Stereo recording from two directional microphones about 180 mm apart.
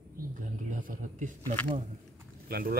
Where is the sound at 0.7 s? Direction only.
45° right (ahead or behind).